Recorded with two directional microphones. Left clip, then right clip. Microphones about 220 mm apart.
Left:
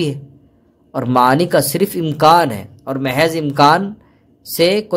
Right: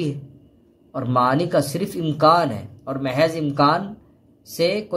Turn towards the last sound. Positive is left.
turn(degrees=30)  # may be behind; listen again after turning